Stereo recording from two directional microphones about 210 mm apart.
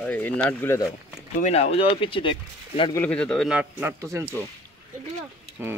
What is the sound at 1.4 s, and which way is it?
Speech, 30° left (ahead or behind).